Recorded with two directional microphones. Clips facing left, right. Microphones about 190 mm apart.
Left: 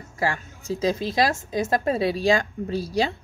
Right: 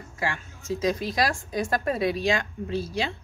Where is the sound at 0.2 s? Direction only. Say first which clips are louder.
Left 5 dB; 35° left (ahead or behind).